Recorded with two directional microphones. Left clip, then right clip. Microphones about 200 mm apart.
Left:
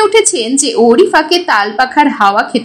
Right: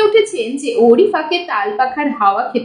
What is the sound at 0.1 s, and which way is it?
A woman's voice, 25° left (ahead or behind).